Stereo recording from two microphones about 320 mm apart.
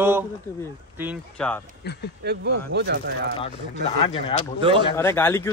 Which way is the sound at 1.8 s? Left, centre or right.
Left.